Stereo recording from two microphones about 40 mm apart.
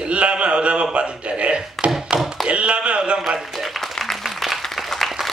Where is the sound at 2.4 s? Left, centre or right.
Right.